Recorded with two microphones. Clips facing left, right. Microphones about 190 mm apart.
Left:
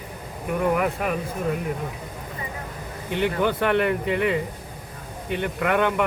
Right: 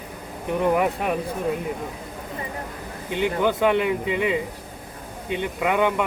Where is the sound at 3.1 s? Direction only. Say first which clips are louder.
Right 1 dB; 15° right (ahead or behind).